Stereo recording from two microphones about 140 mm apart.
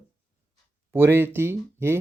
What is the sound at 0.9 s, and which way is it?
Speech, 15° right (ahead or behind).